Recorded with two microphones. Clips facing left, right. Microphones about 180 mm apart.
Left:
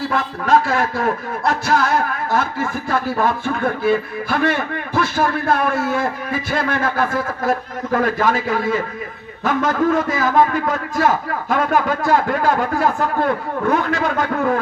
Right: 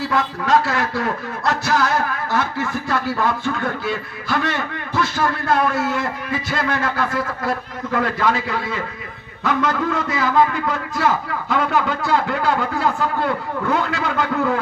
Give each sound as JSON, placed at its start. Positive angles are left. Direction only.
{"t": 0.1, "sound": "music", "side_deg": 50}